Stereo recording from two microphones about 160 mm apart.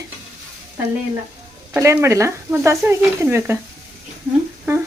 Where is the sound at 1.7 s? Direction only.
15° right (ahead or behind).